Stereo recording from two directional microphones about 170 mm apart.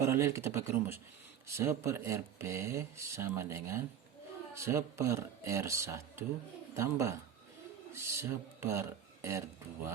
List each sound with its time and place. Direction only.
0.0 s speech: 15° right (ahead or behind)